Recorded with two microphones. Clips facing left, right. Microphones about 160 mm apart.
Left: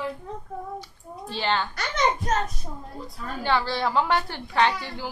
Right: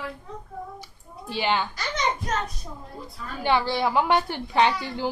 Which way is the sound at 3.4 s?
15° right (ahead or behind).